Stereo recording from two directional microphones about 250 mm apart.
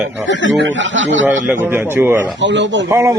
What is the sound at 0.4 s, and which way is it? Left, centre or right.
Speech, right.